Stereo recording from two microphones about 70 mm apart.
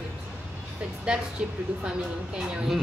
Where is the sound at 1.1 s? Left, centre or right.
Centre.